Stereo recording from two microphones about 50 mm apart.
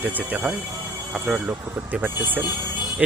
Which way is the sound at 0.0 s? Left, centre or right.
Right.